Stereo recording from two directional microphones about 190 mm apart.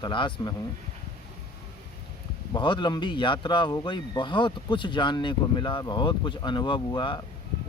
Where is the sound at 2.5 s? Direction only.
25° left (ahead or behind).